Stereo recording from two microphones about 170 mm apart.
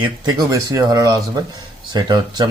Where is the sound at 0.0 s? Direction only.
25° right (ahead or behind).